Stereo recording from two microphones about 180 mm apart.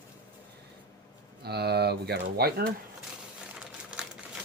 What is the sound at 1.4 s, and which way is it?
Pigeon, 65° right (ahead or behind).